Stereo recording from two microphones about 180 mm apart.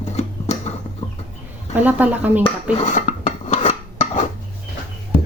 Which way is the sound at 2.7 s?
40° left (ahead or behind).